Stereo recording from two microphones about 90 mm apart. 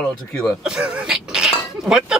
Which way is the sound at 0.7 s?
10° right (ahead or behind).